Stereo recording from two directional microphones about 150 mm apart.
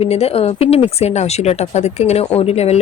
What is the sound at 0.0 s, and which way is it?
Speech, 45° left (ahead or behind).